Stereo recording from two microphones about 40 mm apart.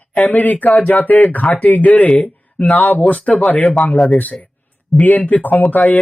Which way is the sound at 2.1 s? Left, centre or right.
Left.